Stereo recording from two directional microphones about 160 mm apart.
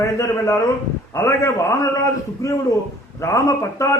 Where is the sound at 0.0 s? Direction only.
20° left (ahead or behind).